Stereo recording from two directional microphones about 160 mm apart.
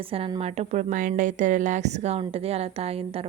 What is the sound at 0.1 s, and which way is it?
A woman's voice, 35° right (ahead or behind).